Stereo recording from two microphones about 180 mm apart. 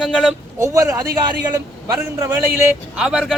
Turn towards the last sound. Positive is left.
turn(degrees=-5)  # may be behind; listen again after turning